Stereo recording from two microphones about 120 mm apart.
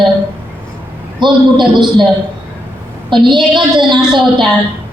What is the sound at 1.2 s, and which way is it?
Speech, 40° right (ahead or behind).